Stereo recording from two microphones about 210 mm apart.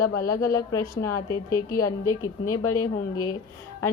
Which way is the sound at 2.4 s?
90° left.